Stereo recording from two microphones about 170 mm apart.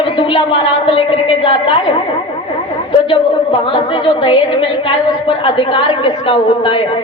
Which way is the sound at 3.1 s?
30° left (ahead or behind).